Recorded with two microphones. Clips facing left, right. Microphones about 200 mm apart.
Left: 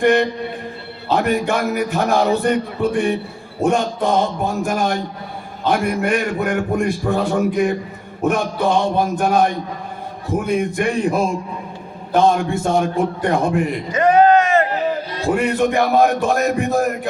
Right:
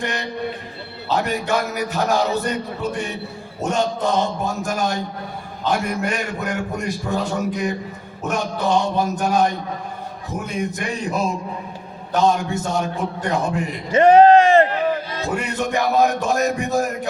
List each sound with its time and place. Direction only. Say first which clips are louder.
0.0 s a man's voice: left 10 dB; 55° left (ahead or behind)
13.9 s a sound: right 3 dB; 30° right (ahead or behind)
15.4 s a man's voice: left 6 dB; 55° left (ahead or behind)